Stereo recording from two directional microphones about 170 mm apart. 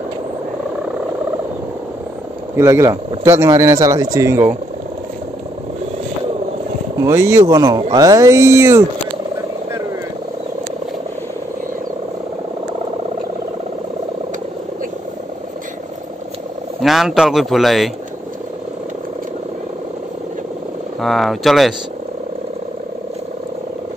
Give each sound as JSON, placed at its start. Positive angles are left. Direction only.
{"t": 2.5, "sound": "speech", "side_deg": -15}
{"t": 7.0, "sound": "speech", "side_deg": -15}
{"t": 16.8, "sound": "speech", "side_deg": 0}
{"t": 21.0, "sound": "speech", "side_deg": 0}